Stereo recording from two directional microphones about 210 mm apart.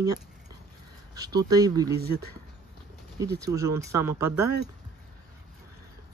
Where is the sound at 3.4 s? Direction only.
15° right (ahead or behind).